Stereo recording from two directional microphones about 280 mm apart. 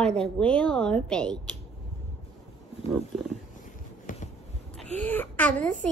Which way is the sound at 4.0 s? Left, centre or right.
Left.